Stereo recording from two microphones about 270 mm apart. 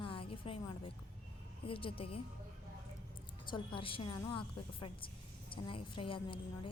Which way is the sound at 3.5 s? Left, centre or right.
Centre.